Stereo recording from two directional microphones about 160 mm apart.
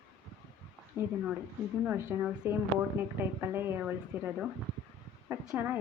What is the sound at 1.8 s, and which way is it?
A woman's voice, 10° right (ahead or behind).